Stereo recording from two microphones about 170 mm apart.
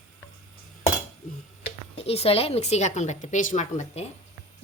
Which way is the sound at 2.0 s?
35° left (ahead or behind).